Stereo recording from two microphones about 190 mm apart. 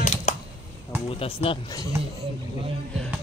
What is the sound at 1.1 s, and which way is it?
Speech, 30° left (ahead or behind).